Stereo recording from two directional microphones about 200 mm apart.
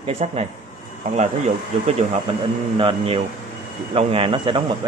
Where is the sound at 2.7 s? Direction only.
25° right (ahead or behind).